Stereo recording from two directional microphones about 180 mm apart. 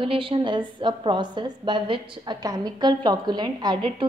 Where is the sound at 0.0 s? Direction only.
30° right (ahead or behind).